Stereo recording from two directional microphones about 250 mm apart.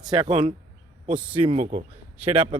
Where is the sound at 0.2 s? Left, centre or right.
Centre.